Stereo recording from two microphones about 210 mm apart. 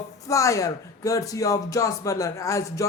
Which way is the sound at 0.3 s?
15° left (ahead or behind).